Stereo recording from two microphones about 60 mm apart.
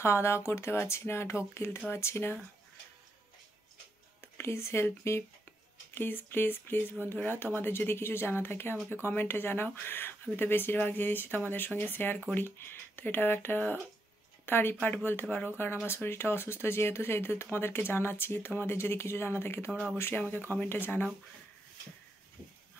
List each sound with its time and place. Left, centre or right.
0.0 s speech: left
4.2 s speech: left
5.9 s a woman's voice: left
19.7 s speech: centre
20.2 s speech: left